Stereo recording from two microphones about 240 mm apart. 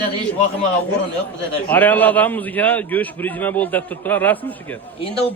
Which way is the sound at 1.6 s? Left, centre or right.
Centre.